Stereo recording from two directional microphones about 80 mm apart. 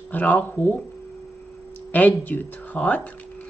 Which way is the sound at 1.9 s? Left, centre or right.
Centre.